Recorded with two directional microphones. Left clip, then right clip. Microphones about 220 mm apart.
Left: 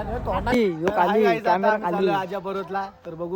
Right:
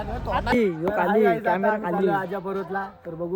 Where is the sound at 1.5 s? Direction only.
35° left (ahead or behind).